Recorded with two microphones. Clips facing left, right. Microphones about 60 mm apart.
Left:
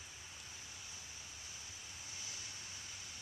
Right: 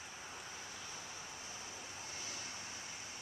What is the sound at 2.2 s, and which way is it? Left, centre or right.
Vehicle, right.